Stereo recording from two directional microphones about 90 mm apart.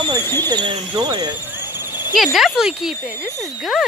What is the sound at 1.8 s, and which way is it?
Insect, 50° left (ahead or behind).